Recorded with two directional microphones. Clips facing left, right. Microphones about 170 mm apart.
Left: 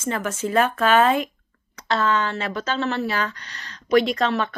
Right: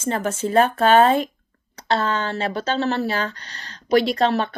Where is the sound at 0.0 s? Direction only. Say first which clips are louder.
Right 2 dB; 30° right (ahead or behind).